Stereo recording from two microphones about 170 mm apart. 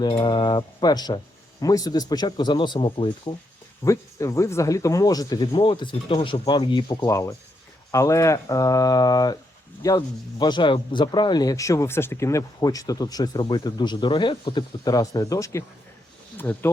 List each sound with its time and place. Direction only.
0.0 s speech: 30° left (ahead or behind)
3.8 s speech: 15° left (ahead or behind)